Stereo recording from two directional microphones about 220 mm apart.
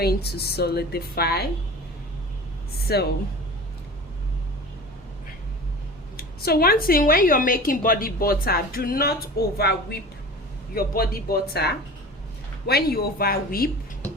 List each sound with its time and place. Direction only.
0.0 s a woman's voice: 45° left (ahead or behind)
2.8 s speech: 45° left (ahead or behind)
6.1 s a woman's voice: 45° left (ahead or behind)